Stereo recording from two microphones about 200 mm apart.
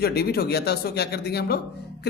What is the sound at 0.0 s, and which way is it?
A man's voice, 50° left (ahead or behind).